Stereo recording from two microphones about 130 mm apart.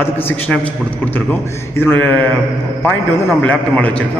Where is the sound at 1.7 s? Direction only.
15° left (ahead or behind).